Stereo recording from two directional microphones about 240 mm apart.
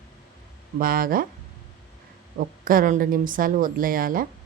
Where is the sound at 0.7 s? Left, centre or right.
Right.